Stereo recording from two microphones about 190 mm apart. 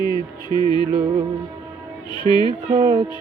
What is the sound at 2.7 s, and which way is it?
Mantra, 25° right (ahead or behind).